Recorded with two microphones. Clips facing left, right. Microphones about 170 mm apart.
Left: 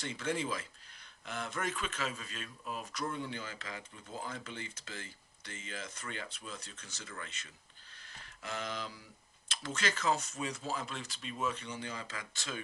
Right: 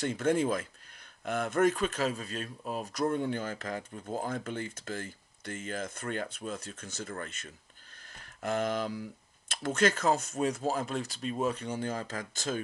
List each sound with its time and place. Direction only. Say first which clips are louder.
0.0 s speech: right 9 dB; 50° right (ahead or behind)